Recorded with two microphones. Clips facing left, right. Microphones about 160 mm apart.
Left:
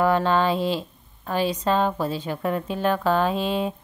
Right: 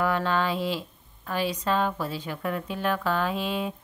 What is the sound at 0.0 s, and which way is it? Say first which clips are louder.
A woman's voice: left 5 dB; 30° left (ahead or behind).